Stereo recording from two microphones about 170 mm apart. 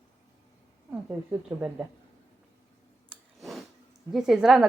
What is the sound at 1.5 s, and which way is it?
Speech, 15° right (ahead or behind).